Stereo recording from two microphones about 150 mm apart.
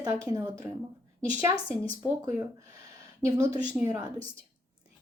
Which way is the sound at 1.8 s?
25° right (ahead or behind).